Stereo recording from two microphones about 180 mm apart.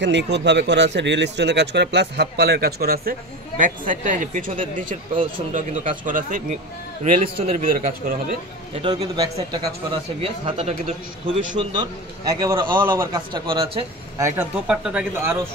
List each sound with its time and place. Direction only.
0.0 s a man's voice: 75° right (ahead or behind); by 7.6 s 40° right (ahead or behind)
7.7 s speech: 50° right (ahead or behind)
8.8 s a man's voice: 25° right (ahead or behind)
10.2 s a man's voice: 35° right (ahead or behind)
12.9 s speech: 15° right (ahead or behind)
13.3 s a man's voice: 30° right (ahead or behind)
14.2 s speech: 15° right (ahead or behind)